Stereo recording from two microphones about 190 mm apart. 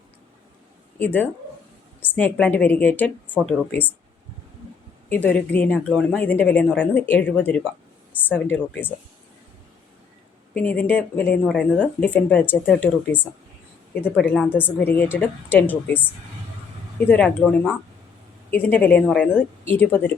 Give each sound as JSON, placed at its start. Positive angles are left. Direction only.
{"t": 0.9, "sound": "speech", "side_deg": 10}
{"t": 5.0, "sound": "speech", "side_deg": 10}
{"t": 10.5, "sound": "speech", "side_deg": 5}
{"t": 17.1, "sound": "speech", "side_deg": 5}